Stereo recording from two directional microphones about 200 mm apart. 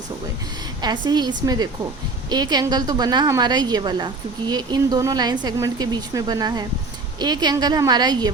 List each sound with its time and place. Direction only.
0.8 s a woman's voice: 20° right (ahead or behind)